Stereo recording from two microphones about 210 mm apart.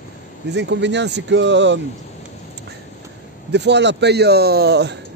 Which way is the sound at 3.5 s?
55° right (ahead or behind).